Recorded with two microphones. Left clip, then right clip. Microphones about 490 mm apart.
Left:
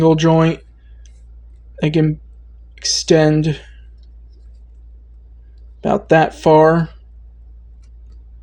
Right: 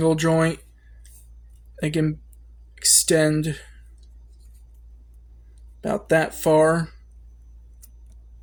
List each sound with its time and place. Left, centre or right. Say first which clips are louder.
0.0 s speech: left 7 dB; right
1.8 s speech: left 7 dB; right
5.8 s speech: left 8 dB; right